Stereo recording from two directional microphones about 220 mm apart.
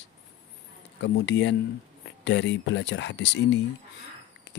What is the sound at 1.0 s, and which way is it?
Speech, 55° left (ahead or behind).